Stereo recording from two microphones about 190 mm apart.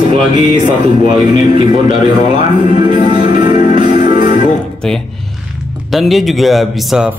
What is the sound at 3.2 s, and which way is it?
Music, 25° right (ahead or behind).